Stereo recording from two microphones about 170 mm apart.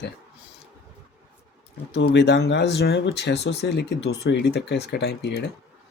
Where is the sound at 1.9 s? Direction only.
90° left.